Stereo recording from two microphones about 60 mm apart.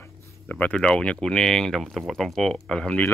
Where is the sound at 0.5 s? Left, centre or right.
Left.